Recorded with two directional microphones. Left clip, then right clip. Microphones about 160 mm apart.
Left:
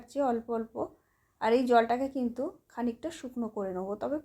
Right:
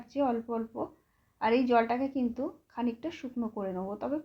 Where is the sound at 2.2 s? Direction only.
30° left (ahead or behind).